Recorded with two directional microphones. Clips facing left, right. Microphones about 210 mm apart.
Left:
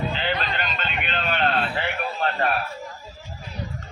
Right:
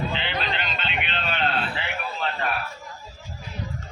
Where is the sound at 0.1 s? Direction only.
40° left (ahead or behind).